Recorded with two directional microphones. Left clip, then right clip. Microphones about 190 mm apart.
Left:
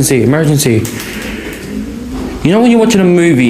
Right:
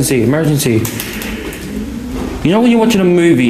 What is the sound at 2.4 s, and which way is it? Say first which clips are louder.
Speech: left 2 dB; 15° left (ahead or behind).